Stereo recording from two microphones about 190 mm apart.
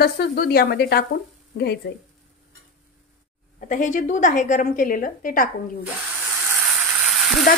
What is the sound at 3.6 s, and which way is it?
A woman's voice, 45° left (ahead or behind).